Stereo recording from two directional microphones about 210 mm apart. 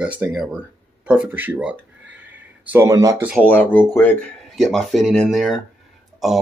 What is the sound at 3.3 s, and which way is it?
Speech, 10° left (ahead or behind).